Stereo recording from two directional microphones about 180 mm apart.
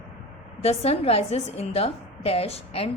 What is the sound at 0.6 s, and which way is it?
A woman's voice, 35° left (ahead or behind).